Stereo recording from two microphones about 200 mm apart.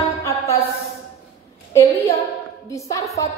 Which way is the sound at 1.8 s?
15° left (ahead or behind).